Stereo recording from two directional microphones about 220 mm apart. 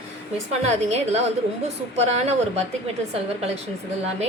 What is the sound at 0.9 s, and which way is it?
A woman's voice, 30° right (ahead or behind).